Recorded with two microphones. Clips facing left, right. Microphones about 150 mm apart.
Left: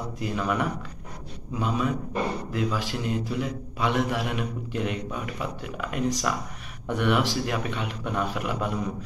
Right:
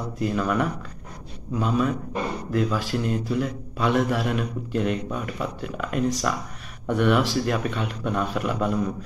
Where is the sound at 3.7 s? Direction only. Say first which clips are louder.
Right 3 dB; 15° left (ahead or behind).